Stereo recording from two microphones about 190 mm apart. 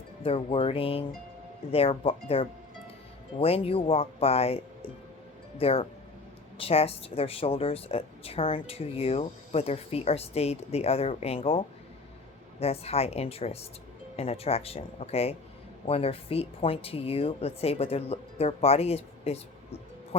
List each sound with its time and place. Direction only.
0.2 s speech: 30° left (ahead or behind)